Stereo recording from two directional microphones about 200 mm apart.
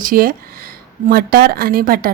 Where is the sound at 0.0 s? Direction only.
45° right (ahead or behind).